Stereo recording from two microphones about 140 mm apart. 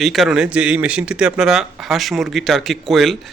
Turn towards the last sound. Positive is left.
turn(degrees=0)  # may be behind; listen again after turning